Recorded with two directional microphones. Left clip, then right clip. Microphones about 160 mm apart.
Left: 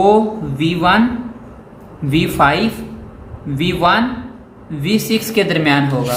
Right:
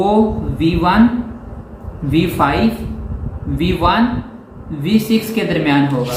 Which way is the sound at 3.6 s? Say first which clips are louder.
Left 1 dB; 90° left.